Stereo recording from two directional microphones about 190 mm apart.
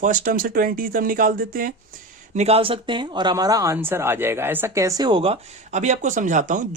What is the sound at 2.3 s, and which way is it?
Speech, 35° right (ahead or behind).